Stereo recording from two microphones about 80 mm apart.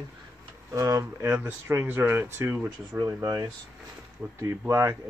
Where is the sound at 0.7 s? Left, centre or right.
Right.